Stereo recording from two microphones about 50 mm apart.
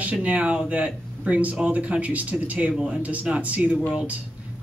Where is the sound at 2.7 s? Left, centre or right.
Centre.